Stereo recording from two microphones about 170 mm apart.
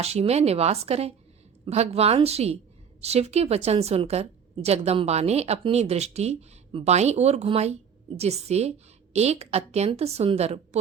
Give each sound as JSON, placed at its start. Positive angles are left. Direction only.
{"t": 0.0, "sound": "a woman's voice", "side_deg": -40}